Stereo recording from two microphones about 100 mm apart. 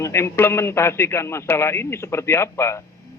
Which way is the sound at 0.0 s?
25° left (ahead or behind).